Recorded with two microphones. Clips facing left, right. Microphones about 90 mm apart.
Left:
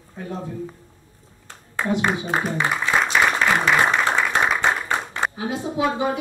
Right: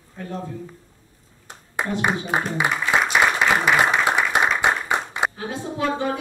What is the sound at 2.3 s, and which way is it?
Speech, 15° right (ahead or behind).